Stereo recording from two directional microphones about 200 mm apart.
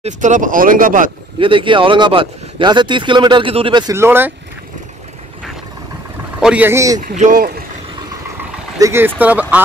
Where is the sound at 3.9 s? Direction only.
10° right (ahead or behind).